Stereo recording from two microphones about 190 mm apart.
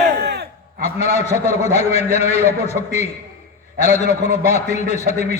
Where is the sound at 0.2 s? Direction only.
60° right (ahead or behind).